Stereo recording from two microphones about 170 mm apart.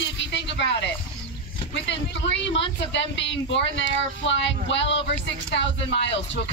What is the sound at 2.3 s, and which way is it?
Speech, 30° left (ahead or behind).